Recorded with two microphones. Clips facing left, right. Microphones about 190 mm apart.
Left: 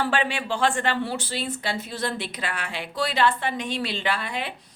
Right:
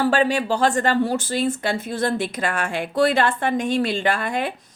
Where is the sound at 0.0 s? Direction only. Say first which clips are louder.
Right 6 dB; 40° right (ahead or behind).